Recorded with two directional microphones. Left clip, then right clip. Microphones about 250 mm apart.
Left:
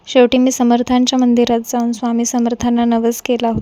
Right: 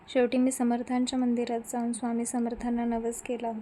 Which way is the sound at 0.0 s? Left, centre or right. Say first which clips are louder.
Left 15 dB; left.